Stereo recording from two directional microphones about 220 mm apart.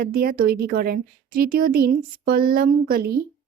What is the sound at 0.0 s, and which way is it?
Speech, 40° right (ahead or behind).